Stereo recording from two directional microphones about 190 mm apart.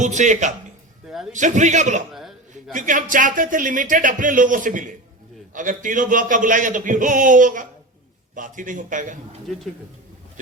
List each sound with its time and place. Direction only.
0.0 s a man's voice: 40° right (ahead or behind)
1.0 s a sound: centre (ahead or behind)
1.3 s a man's voice: 40° right (ahead or behind)